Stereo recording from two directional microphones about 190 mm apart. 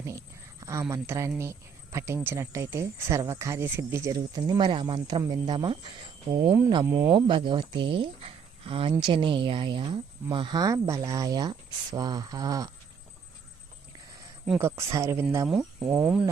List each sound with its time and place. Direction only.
0.0 s a sound: 15° right (ahead or behind)
1.4 s speech: 15° right (ahead or behind)
6.4 s speech: 10° right (ahead or behind)
7.3 s speech: 25° right (ahead or behind)
14.6 s speech: 15° right (ahead or behind)